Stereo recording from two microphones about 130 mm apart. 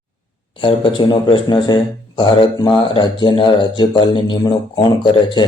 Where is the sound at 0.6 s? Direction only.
40° left (ahead or behind).